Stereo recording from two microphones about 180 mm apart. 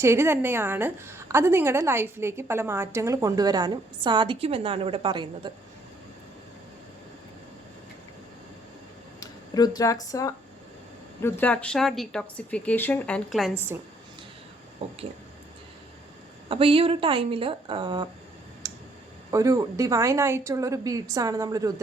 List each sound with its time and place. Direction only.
0.0 s a woman's voice: 15° right (ahead or behind)
9.2 s a woman's voice: 20° left (ahead or behind); by 13.5 s 5° left (ahead or behind)
14.8 s speech: 30° right (ahead or behind)
16.5 s a woman's voice: 30° right (ahead or behind)
18.6 s clicking: 20° right (ahead or behind)
19.3 s a woman's voice: 20° right (ahead or behind)